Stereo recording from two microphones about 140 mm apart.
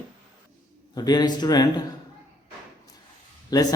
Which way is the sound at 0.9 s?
30° left (ahead or behind).